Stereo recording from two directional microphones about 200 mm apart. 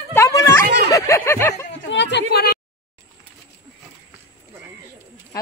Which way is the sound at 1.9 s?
60° left (ahead or behind).